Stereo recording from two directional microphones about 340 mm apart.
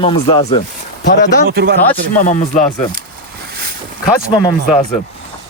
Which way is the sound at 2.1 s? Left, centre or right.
Left.